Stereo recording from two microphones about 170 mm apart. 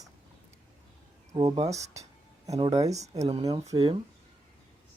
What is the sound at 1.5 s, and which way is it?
Speech, 40° right (ahead or behind).